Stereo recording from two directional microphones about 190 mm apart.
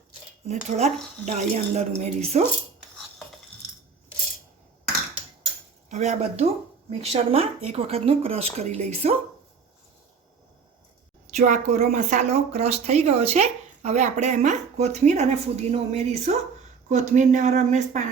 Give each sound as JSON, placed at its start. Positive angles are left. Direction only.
{"t": 0.4, "sound": "speech", "side_deg": -35}
{"t": 5.9, "sound": "speech", "side_deg": -35}
{"t": 11.3, "sound": "speech", "side_deg": -40}